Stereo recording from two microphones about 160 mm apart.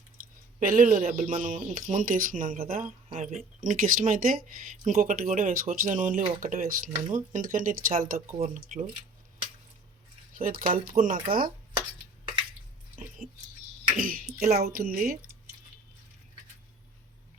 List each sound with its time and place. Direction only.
0.6 s speech: 60° right (ahead or behind)
2.7 s speech: 40° right (ahead or behind)
3.2 s speech: 50° right (ahead or behind)
10.3 s speech: 60° right (ahead or behind)
13.0 s a sound: 55° right (ahead or behind)
13.9 s speech: 60° right (ahead or behind)
14.4 s speech: 45° right (ahead or behind)
14.7 s speech: 65° right (ahead or behind)